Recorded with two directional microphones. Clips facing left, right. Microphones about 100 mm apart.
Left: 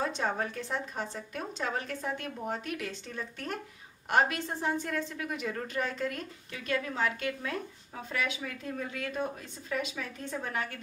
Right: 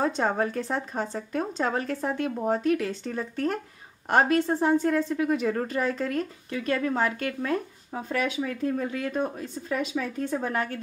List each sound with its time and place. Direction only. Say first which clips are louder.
0.0 s a woman's voice: right 6 dB; 40° right (ahead or behind)